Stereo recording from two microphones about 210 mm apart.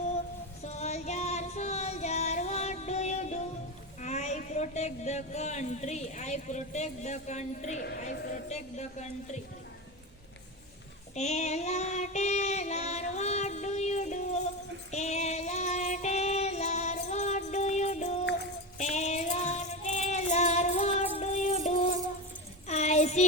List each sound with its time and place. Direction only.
0.6 s female singing: 30° left (ahead or behind)
4.0 s speech: 30° left (ahead or behind)
8.1 s speech: 50° left (ahead or behind)
8.4 s a woman's voice: 30° left (ahead or behind)
11.1 s female singing: 30° left (ahead or behind)
14.8 s music: 30° left (ahead or behind)
22.6 s child singing: 35° left (ahead or behind)